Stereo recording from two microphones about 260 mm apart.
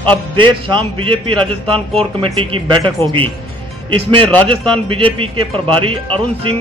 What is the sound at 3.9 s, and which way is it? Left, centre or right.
A man's voice, right.